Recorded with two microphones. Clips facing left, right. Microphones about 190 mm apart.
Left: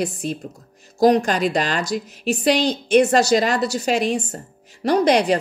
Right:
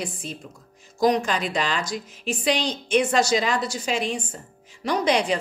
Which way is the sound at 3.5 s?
70° left (ahead or behind).